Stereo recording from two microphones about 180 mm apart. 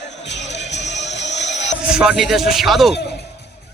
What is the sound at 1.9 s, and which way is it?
Speech, 5° right (ahead or behind).